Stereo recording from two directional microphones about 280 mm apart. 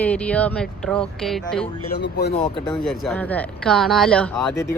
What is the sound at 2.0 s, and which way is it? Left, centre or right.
Speech, left.